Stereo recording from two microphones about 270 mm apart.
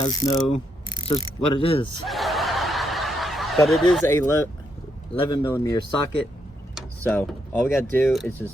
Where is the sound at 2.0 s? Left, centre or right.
Centre.